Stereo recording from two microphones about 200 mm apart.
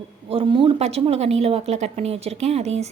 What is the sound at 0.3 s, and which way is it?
A woman's voice, 25° right (ahead or behind).